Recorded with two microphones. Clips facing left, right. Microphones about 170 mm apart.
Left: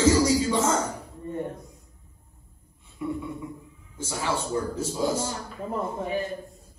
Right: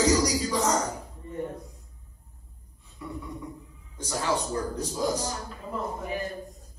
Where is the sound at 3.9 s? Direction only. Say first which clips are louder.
Right 1 dB; 5° left (ahead or behind).